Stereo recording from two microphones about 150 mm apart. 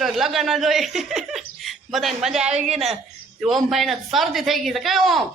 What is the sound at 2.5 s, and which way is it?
Speech, 45° right (ahead or behind).